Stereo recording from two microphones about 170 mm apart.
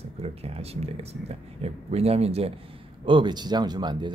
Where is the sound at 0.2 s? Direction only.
35° right (ahead or behind).